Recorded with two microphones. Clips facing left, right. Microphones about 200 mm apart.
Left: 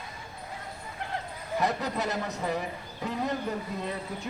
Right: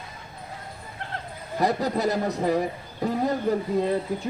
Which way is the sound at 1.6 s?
35° right (ahead or behind).